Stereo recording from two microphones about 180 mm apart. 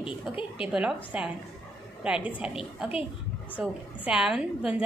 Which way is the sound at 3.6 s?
5° right (ahead or behind).